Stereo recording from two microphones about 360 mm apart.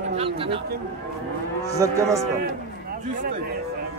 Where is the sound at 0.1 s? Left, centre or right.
Centre.